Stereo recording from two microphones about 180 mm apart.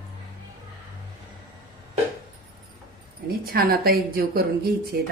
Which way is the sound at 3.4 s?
55° right (ahead or behind).